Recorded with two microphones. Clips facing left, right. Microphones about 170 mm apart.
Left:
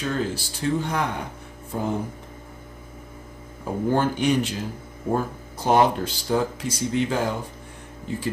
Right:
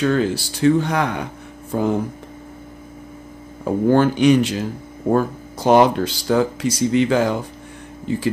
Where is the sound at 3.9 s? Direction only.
90° right.